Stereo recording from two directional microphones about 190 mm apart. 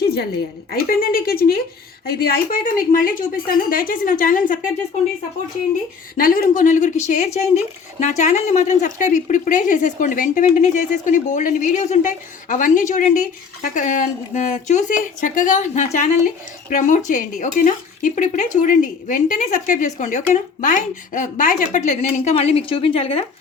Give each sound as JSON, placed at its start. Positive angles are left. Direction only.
{"t": 0.7, "sound": "a woman's voice", "side_deg": 50}
{"t": 6.1, "sound": "a woman's voice", "side_deg": 45}